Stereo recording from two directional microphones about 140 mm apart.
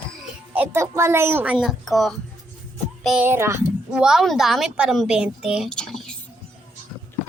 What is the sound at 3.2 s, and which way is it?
Speech, 15° right (ahead or behind).